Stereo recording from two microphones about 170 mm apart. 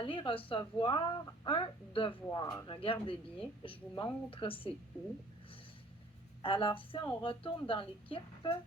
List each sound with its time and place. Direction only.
0.0 s speech: 30° left (ahead or behind)
6.4 s speech: 30° left (ahead or behind)